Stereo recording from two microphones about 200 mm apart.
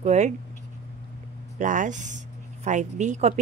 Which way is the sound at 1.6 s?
40° right (ahead or behind).